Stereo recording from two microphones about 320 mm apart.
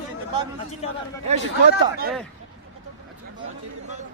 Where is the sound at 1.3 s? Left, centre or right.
Right.